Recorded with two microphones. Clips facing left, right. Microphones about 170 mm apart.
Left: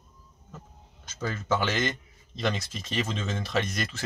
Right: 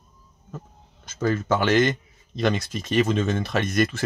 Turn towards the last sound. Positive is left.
turn(degrees=-55)  # may be behind; listen again after turning